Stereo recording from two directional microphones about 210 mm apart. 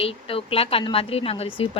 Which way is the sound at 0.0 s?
25° left (ahead or behind).